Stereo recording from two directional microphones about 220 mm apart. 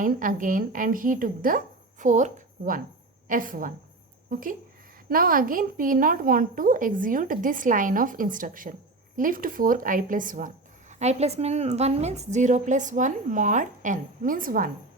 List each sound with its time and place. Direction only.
0.0 s speech: 35° right (ahead or behind)